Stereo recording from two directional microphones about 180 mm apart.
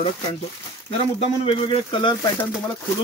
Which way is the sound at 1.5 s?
30° left (ahead or behind).